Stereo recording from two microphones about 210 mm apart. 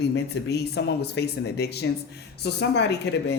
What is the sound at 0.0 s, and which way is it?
Speech, 55° left (ahead or behind).